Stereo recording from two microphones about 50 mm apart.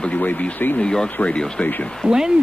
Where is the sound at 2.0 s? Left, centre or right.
Centre.